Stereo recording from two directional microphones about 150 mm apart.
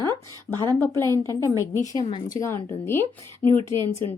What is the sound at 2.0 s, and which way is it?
Speech, 35° left (ahead or behind).